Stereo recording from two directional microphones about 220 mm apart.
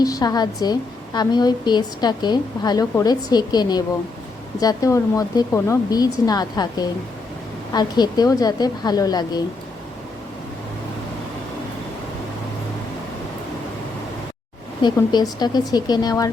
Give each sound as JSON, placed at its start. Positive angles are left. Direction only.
{"t": 0.0, "sound": "a woman's voice", "side_deg": 15}
{"t": 14.8, "sound": "a woman's voice", "side_deg": 20}